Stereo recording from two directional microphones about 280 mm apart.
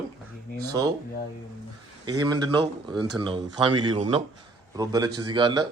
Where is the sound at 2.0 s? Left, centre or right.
Centre.